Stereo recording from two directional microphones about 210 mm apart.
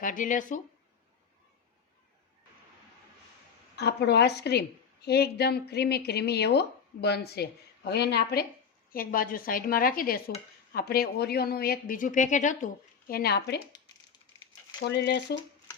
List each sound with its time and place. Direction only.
0.0 s speech: 40° left (ahead or behind)
3.8 s a woman's voice: 50° left (ahead or behind)
14.8 s a woman's voice: 50° left (ahead or behind)